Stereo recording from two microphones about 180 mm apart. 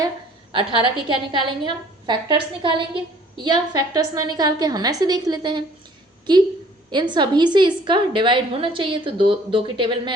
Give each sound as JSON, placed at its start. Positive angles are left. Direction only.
{"t": 0.5, "sound": "a woman's voice", "side_deg": -30}